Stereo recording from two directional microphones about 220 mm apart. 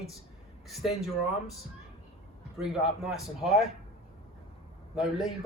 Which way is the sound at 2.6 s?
Centre (ahead or behind).